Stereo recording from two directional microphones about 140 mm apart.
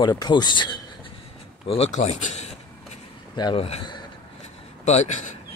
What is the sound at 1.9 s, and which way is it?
Speech, 55° left (ahead or behind).